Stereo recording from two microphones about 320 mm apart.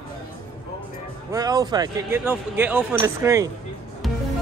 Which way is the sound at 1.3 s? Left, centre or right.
Centre.